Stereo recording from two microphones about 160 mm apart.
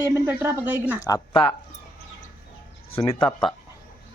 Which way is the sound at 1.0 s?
25° left (ahead or behind).